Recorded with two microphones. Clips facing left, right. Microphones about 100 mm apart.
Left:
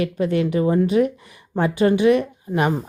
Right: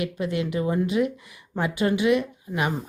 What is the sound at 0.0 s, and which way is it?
Speech, 35° left (ahead or behind).